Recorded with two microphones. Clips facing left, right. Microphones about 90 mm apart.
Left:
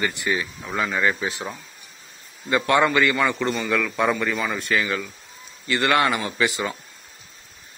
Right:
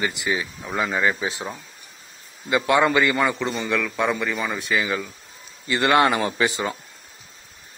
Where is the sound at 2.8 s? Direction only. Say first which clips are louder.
Even; 25° right (ahead or behind).